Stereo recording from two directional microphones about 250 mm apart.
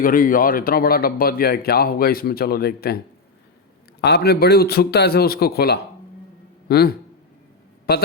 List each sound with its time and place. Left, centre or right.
0.0 s speech: left
4.0 s speech: left